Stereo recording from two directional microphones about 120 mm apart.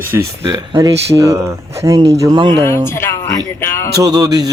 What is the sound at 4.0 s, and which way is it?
Music, 30° right (ahead or behind).